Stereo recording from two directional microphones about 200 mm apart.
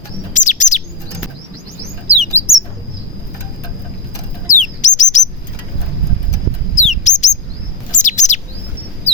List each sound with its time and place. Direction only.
0.3 s chirp: 40° left (ahead or behind)
2.0 s bird: centre (ahead or behind)
4.5 s bird: 35° left (ahead or behind)
6.7 s rodents: 35° left (ahead or behind)
7.9 s chirp: 40° left (ahead or behind)